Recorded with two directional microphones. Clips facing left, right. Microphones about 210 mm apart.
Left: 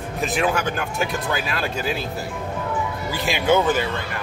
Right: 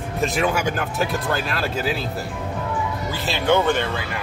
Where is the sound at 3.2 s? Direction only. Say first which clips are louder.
Left 1 dB; 10° left (ahead or behind).